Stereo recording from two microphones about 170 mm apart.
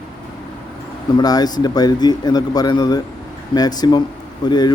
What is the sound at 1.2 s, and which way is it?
Speech, 25° left (ahead or behind).